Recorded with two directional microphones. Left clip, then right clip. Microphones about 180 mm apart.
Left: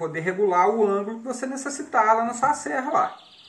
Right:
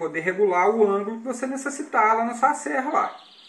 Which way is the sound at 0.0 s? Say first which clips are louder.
Right 1 dB; 15° left (ahead or behind).